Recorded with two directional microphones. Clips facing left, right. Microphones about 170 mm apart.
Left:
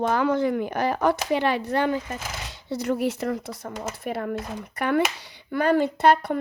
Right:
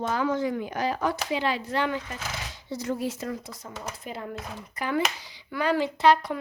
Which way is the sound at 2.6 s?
70° left (ahead or behind).